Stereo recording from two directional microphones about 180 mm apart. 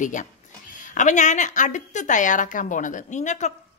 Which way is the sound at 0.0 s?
45° left (ahead or behind).